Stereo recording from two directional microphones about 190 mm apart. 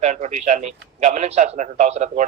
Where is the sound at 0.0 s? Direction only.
35° right (ahead or behind).